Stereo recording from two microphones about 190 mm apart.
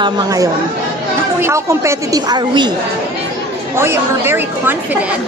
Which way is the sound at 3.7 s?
10° right (ahead or behind).